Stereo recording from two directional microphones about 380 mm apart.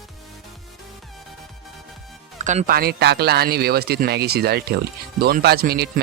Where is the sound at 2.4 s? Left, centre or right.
Centre.